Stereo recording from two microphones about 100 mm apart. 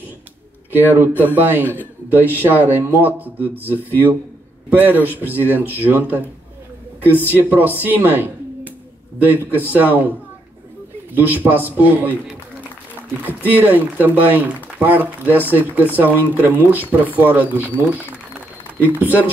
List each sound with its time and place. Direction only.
0.7 s speech: 20° right (ahead or behind)
11.1 s speech: 20° right (ahead or behind)
13.2 s speech: 20° right (ahead or behind)